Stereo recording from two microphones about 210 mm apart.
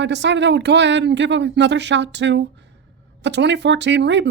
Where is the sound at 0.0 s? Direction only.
55° right (ahead or behind).